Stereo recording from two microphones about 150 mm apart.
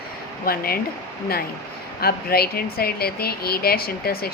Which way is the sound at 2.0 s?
90° left.